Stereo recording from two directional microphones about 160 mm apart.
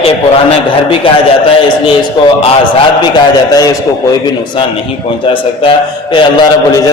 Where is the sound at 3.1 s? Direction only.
25° left (ahead or behind).